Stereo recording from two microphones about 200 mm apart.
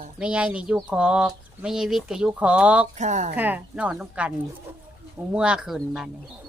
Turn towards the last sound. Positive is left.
turn(degrees=0)  # may be behind; listen again after turning